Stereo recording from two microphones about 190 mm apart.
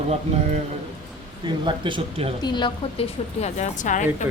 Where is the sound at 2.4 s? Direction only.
25° left (ahead or behind); by 4.0 s 40° left (ahead or behind).